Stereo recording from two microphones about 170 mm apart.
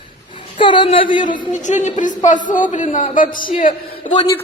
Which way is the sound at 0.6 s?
30° left (ahead or behind).